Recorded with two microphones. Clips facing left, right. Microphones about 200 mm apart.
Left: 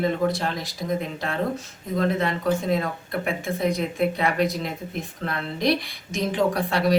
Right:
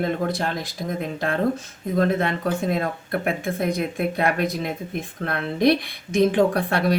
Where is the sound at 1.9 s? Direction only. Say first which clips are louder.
Right 2 dB; 55° right (ahead or behind).